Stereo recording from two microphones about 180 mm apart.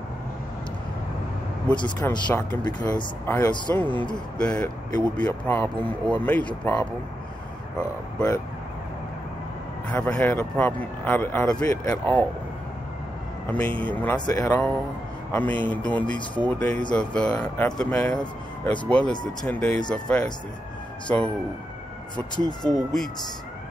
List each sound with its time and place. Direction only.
1.8 s speech: 15° left (ahead or behind)
2.6 s speech: 25° left (ahead or behind)
9.8 s speech: 10° left (ahead or behind)
13.5 s speech: 10° left (ahead or behind)
22.6 s speech: 5° left (ahead or behind)